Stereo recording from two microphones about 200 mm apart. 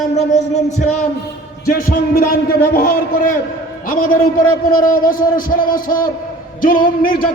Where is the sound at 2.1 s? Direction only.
45° left (ahead or behind).